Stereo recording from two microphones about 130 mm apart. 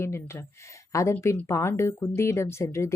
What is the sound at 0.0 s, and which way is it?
Speech, 20° left (ahead or behind).